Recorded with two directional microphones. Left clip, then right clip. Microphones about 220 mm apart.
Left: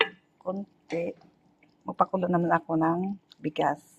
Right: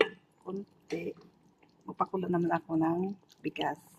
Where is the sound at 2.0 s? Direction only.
20° left (ahead or behind).